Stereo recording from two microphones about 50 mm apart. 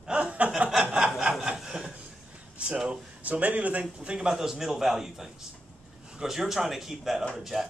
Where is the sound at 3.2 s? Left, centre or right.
Right.